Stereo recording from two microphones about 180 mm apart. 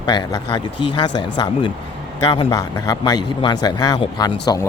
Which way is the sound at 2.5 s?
20° left (ahead or behind).